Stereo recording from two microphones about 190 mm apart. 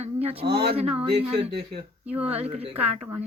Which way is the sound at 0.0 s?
30° right (ahead or behind).